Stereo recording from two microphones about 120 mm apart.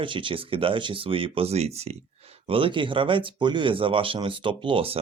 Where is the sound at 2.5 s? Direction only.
50° right (ahead or behind).